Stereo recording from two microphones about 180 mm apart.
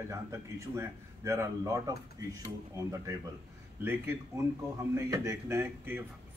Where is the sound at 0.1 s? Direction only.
15° right (ahead or behind).